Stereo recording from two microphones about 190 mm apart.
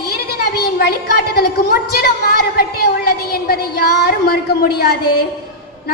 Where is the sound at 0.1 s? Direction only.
55° left (ahead or behind).